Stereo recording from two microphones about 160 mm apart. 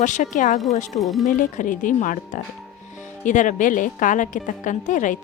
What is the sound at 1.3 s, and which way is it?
A woman's voice, 55° left (ahead or behind).